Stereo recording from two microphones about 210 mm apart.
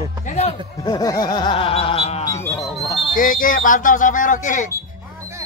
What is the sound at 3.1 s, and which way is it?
Speech, 40° left (ahead or behind).